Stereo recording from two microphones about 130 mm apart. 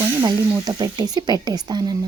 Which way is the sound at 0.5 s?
30° right (ahead or behind).